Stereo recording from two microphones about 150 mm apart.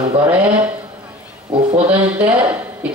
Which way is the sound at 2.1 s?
10° right (ahead or behind).